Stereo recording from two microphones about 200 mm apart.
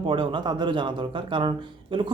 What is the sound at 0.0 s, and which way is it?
A man's voice, 25° right (ahead or behind).